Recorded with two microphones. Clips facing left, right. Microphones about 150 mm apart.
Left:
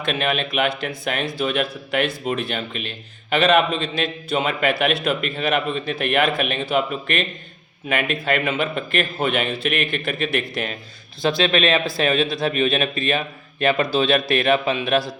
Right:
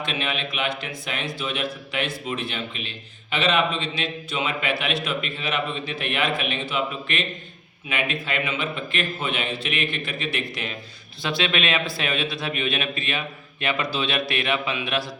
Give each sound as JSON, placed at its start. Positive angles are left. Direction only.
{"t": 0.0, "sound": "speech", "side_deg": 55}
{"t": 11.2, "sound": "speech", "side_deg": 40}